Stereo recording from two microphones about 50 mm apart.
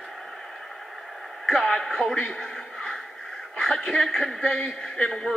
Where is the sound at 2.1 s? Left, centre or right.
Left.